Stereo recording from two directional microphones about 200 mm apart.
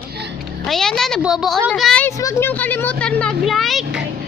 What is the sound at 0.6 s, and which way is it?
A woman's voice, centre (ahead or behind).